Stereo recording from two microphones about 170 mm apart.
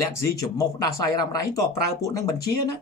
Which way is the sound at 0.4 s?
20° left (ahead or behind).